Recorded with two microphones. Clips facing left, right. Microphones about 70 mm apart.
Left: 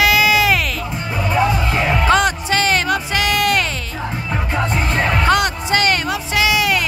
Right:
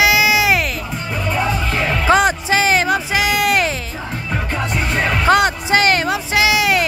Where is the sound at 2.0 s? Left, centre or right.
Centre.